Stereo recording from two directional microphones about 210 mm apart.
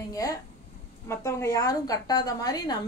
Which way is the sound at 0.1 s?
15° left (ahead or behind).